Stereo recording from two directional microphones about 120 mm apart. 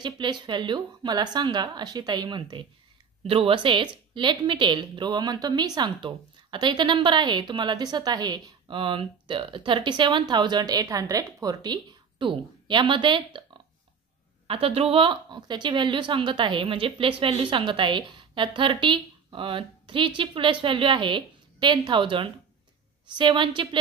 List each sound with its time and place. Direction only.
0.0 s a woman's voice: 40° right (ahead or behind)
14.5 s a woman's voice: 50° right (ahead or behind)